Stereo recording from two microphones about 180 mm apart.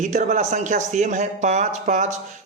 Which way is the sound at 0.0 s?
40° right (ahead or behind).